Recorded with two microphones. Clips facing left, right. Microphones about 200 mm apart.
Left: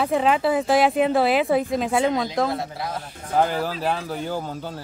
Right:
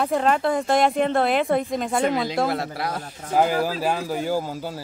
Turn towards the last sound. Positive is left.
turn(degrees=-10)  # may be behind; listen again after turning